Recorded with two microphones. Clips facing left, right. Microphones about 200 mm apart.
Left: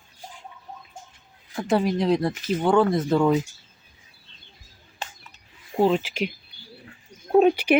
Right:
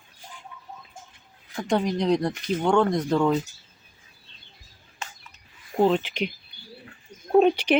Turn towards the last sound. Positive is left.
turn(degrees=10)  # may be behind; listen again after turning